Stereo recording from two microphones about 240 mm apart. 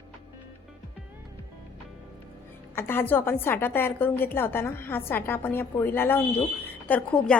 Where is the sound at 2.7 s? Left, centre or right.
Centre.